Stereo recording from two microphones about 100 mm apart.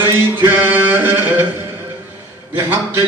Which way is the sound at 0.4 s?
20° right (ahead or behind).